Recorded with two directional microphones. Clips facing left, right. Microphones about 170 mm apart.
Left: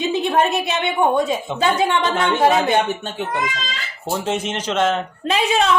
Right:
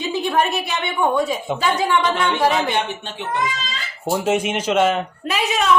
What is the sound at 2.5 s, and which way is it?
Speech, 45° left (ahead or behind).